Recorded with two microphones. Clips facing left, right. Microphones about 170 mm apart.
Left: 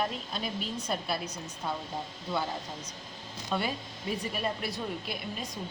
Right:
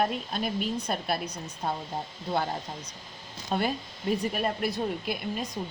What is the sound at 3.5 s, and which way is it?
A woman's voice, 50° right (ahead or behind).